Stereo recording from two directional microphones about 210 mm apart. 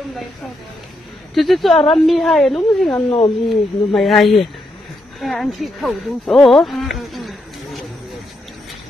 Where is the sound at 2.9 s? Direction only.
20° left (ahead or behind).